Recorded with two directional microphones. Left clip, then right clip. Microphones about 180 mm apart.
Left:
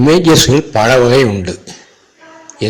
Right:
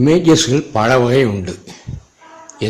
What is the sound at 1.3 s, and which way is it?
Speech, 5° left (ahead or behind).